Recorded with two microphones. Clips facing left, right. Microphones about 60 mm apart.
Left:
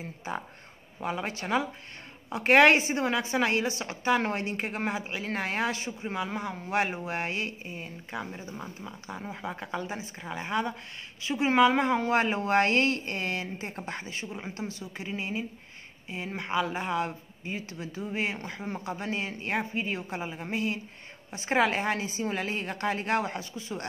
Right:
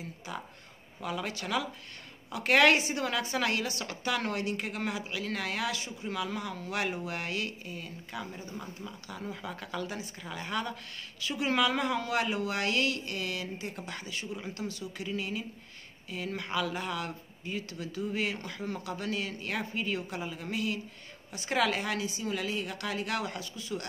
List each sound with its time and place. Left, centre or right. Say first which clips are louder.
0.0 s a woman's voice: left 5 dB; left